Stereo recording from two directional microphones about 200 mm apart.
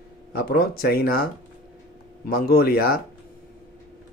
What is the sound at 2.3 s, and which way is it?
Speech, 50° left (ahead or behind).